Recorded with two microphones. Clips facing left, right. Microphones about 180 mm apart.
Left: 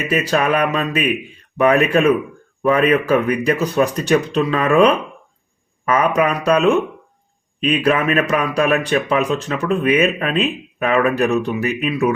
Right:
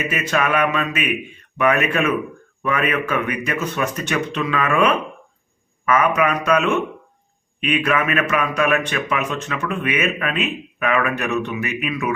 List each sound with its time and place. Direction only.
0.1 s speech: 35° left (ahead or behind)